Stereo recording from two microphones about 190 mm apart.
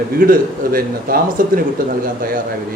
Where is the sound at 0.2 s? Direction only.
50° right (ahead or behind).